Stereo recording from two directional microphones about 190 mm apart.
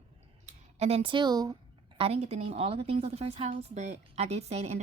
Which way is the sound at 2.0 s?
30° right (ahead or behind).